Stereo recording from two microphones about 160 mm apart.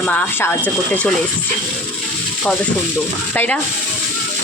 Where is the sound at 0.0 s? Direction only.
10° left (ahead or behind).